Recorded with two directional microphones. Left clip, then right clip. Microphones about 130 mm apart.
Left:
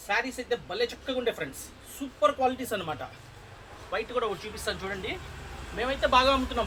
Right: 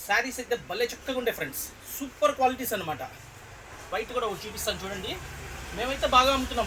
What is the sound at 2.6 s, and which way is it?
Speech, 5° right (ahead or behind).